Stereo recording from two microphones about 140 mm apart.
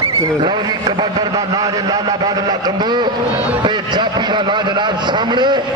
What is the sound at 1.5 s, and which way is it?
A man's voice, 30° right (ahead or behind).